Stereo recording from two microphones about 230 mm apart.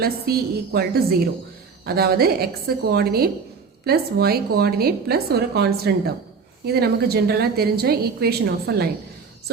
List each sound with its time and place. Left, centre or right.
0.0 s a woman's voice: right